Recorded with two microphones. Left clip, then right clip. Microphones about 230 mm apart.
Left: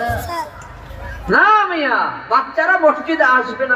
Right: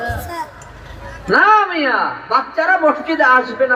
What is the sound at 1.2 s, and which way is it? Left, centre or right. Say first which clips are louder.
A man's voice: right 1 dB; right.